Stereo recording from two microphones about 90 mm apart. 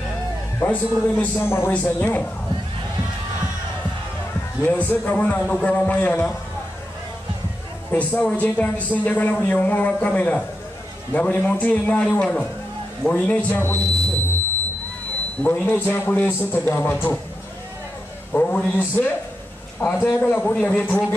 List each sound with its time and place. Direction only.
0.6 s a man's voice: 20° left (ahead or behind)
1.7 s speech: 15° left (ahead or behind)
4.6 s speech: 20° left (ahead or behind)
7.9 s speech: 15° left (ahead or behind)
15.4 s a man's voice: 20° left (ahead or behind)
18.3 s a man's voice: 15° left (ahead or behind)